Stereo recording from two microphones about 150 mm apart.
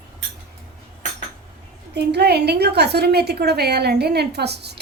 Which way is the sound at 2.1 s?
90° right.